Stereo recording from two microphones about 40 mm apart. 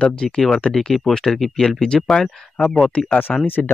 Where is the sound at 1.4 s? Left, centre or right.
Centre.